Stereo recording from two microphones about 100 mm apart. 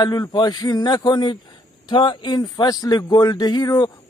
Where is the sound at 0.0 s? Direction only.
40° left (ahead or behind).